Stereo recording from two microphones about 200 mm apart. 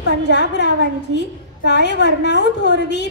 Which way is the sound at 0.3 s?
60° left (ahead or behind).